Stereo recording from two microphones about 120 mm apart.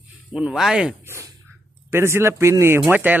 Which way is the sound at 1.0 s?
20° right (ahead or behind).